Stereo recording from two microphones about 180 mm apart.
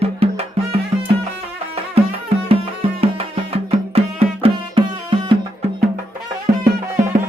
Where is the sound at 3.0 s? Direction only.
35° right (ahead or behind).